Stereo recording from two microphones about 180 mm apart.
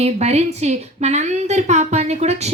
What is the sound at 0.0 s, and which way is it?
Speech, 35° right (ahead or behind).